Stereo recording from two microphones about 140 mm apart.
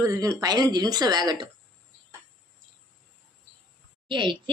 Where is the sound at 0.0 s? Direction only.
25° right (ahead or behind).